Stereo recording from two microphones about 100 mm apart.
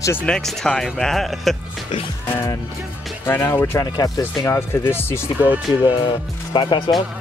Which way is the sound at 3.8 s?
35° left (ahead or behind).